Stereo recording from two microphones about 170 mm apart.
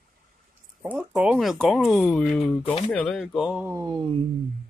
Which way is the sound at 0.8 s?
10° right (ahead or behind).